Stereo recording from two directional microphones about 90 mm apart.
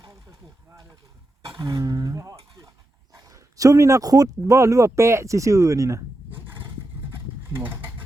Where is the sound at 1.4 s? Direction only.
45° right (ahead or behind).